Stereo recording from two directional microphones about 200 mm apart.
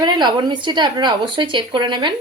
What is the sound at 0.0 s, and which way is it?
Speech, 20° right (ahead or behind).